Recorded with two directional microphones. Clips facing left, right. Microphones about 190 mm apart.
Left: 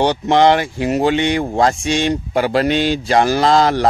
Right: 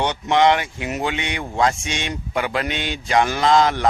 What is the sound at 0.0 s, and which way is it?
Speech, 35° left (ahead or behind).